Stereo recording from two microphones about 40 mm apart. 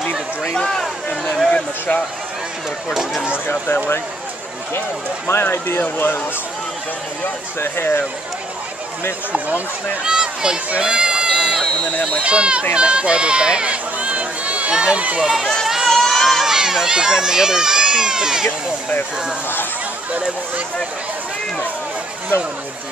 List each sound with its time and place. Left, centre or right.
0.6 s speech: centre
1.5 s speech: left
3.4 s speech: left
5.3 s speech: left
5.8 s speech: left
7.6 s speech: left
10.0 s a child's voice: right
10.8 s a sound: right
12.2 s speech: right
12.7 s run: right
14.7 s speech: right
15.9 s crowd: centre
16.4 s speech: centre